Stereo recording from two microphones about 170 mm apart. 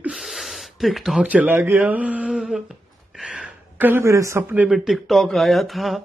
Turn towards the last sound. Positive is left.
turn(degrees=0)  # may be behind; listen again after turning